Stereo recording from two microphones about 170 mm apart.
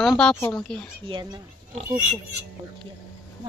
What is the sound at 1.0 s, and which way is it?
Speech, 30° right (ahead or behind).